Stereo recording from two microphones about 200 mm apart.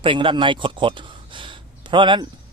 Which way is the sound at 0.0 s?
25° right (ahead or behind).